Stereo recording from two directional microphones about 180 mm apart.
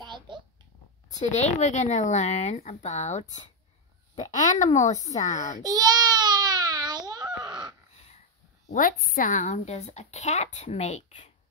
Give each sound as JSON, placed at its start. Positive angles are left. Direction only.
{"t": 0.0, "sound": "babbling", "side_deg": -25}
{"t": 1.1, "sound": "a child's voice", "side_deg": 40}
{"t": 5.6, "sound": "baby cry", "side_deg": -20}
{"t": 8.6, "sound": "speech", "side_deg": 50}